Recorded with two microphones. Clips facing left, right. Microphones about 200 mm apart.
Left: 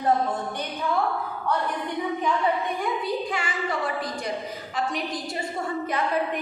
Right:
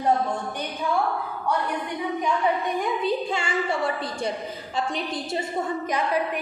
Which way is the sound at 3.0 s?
25° right (ahead or behind).